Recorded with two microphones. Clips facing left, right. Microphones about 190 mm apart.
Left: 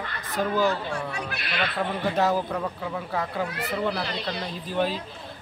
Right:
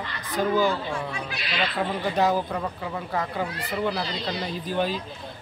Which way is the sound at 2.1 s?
Centre (ahead or behind).